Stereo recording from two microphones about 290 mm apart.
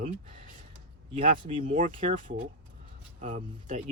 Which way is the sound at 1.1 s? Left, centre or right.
Centre.